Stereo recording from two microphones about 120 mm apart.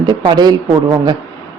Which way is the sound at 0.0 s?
35° right (ahead or behind).